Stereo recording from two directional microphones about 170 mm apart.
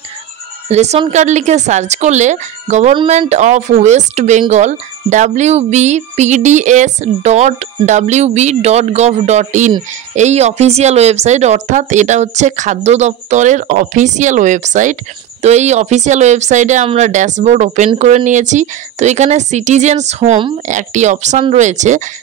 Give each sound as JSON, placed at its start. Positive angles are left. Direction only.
{"t": 0.7, "sound": "a woman's voice", "side_deg": -40}
{"t": 20.6, "sound": "a woman's voice", "side_deg": -45}